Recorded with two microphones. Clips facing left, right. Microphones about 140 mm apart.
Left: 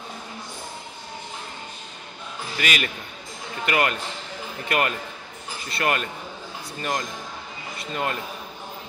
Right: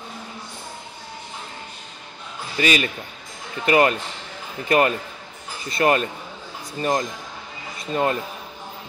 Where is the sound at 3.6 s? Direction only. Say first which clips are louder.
Right 6 dB; 30° right (ahead or behind).